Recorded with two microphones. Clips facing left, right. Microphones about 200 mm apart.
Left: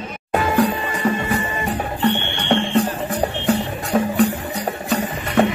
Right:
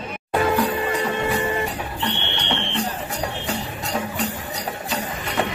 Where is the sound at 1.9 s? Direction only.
45° left (ahead or behind).